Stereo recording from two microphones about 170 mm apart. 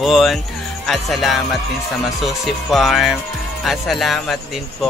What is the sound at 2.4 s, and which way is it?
Speech, centre (ahead or behind).